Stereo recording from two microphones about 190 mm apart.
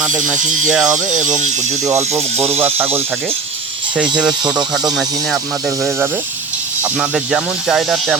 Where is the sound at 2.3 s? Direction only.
35° right (ahead or behind).